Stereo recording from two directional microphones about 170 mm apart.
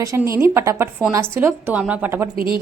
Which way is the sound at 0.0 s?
20° right (ahead or behind).